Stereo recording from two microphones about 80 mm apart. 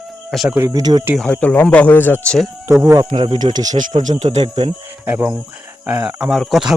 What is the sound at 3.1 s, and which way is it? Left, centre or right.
Speech, right.